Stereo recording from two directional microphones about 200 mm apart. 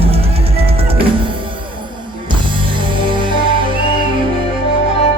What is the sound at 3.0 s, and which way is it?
Music, 25° right (ahead or behind).